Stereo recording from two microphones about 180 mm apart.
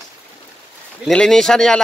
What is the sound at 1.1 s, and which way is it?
Speech, 5° left (ahead or behind).